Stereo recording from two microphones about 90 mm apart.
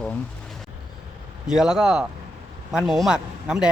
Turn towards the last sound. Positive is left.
turn(degrees=-10)  # may be behind; listen again after turning